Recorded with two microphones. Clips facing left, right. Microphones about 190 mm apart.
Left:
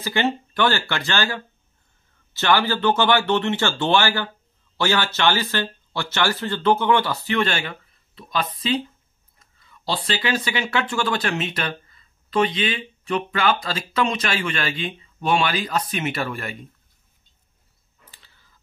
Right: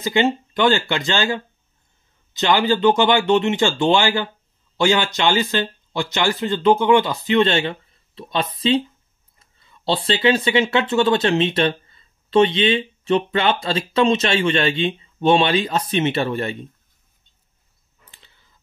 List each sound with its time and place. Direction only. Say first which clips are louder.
0.0 s speech: right 4 dB; 20° right (ahead or behind)